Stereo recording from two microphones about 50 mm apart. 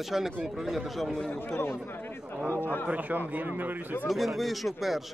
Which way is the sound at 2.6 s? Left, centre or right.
Left.